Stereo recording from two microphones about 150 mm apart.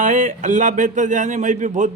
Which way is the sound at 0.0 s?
55° right (ahead or behind).